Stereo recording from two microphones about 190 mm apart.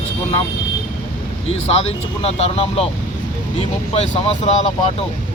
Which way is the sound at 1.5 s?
30° left (ahead or behind).